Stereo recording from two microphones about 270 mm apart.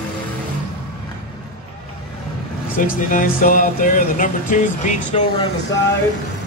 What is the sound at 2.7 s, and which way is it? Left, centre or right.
Speech, left.